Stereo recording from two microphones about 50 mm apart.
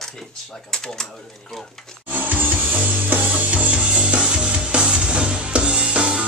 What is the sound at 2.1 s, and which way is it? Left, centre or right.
Music, right.